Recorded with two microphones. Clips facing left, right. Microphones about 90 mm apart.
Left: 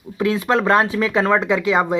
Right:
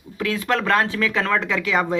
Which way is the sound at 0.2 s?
25° left (ahead or behind).